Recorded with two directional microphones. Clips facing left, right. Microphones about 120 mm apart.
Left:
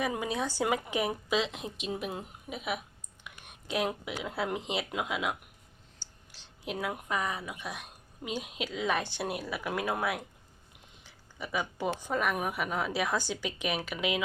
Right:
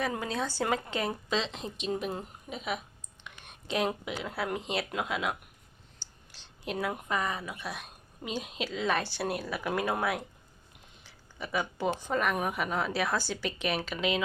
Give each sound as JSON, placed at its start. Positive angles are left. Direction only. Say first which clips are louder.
{"t": 0.0, "sound": "a woman's voice", "louder": "even", "side_deg": 15}
{"t": 3.2, "sound": "whispering", "louder": "right 2 dB", "side_deg": 10}
{"t": 4.3, "sound": "a woman's voice", "louder": "left 1 dB", "side_deg": 20}
{"t": 6.7, "sound": "a woman's voice", "louder": "right 2 dB", "side_deg": 5}
{"t": 11.0, "sound": "a sound", "louder": "right 1 dB", "side_deg": 10}
{"t": 11.9, "sound": "a woman's voice", "louder": "right 1 dB", "side_deg": 10}